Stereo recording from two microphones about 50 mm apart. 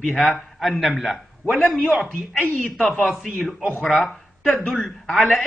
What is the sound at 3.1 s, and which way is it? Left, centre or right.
Speech, centre.